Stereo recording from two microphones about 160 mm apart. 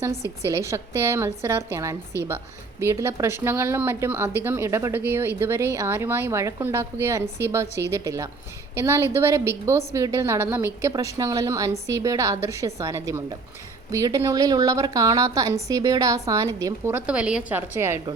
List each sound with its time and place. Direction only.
0.4 s a woman's voice: 20° right (ahead or behind)
17.1 s speech: 5° right (ahead or behind)